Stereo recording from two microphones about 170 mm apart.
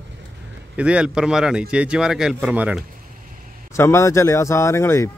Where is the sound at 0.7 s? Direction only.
5° right (ahead or behind).